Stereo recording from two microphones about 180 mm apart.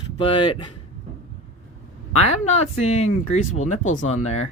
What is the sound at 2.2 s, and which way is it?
Speech, 40° left (ahead or behind).